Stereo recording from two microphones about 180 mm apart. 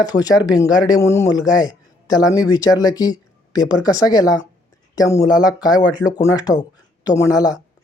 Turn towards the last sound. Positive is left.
turn(degrees=20)  # may be behind; listen again after turning